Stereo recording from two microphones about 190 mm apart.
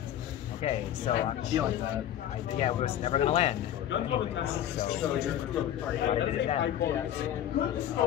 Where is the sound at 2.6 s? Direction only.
35° left (ahead or behind).